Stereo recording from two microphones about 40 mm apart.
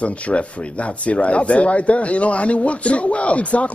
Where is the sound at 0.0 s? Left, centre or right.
Left.